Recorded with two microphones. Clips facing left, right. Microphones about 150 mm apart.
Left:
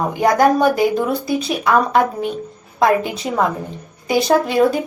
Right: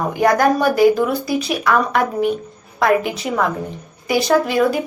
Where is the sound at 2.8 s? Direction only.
25° left (ahead or behind).